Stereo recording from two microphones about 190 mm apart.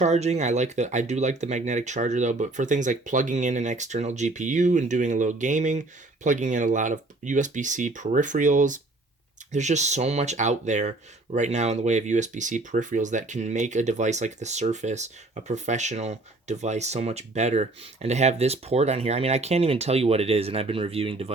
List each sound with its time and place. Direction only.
0.0 s speech: 35° right (ahead or behind)